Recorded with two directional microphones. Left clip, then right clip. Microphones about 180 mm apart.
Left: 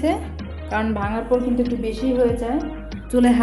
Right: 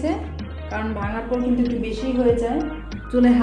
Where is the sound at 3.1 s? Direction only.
35° left (ahead or behind).